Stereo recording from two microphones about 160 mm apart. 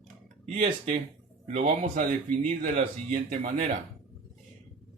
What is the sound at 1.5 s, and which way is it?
Speech, 60° right (ahead or behind).